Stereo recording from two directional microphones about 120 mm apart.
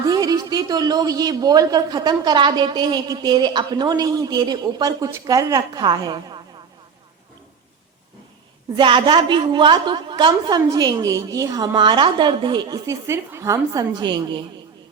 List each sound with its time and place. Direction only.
0.0 s speech: 30° right (ahead or behind)
8.7 s speech: 40° right (ahead or behind)